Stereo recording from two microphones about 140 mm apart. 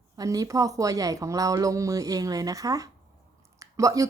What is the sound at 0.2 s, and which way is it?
A woman's voice, 25° right (ahead or behind).